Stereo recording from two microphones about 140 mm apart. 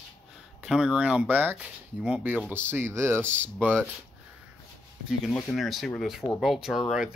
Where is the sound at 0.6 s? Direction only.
5° right (ahead or behind).